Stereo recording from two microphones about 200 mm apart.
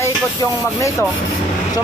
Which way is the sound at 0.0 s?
15° left (ahead or behind).